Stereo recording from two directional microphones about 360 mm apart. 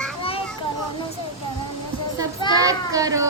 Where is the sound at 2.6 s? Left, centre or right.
Centre.